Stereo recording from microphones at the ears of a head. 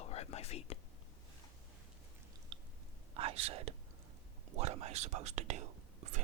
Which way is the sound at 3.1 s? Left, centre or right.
Right.